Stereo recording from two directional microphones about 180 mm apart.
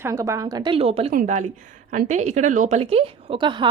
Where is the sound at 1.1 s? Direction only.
45° right (ahead or behind); by 3.7 s 25° right (ahead or behind).